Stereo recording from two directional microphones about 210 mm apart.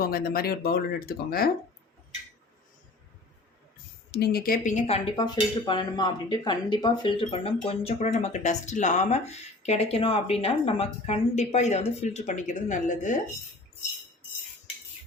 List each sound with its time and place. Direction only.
0.0 s speech: 45° left (ahead or behind)
4.1 s speech: 50° left (ahead or behind)
5.1 s speech: 20° left (ahead or behind); by 13.1 s 35° left (ahead or behind)